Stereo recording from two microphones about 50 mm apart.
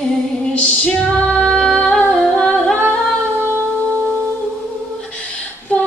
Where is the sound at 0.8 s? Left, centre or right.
Left.